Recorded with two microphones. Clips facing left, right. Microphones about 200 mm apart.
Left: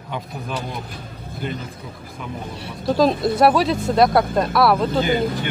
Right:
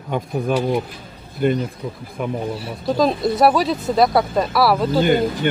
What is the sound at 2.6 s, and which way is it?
Speech, centre (ahead or behind).